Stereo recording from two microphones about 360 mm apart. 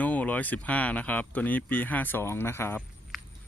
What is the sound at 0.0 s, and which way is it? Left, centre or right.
Speech, centre.